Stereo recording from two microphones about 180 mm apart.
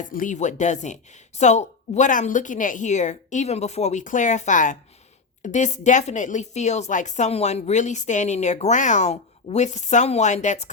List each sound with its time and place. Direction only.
0.1 s a woman's voice: 45° left (ahead or behind)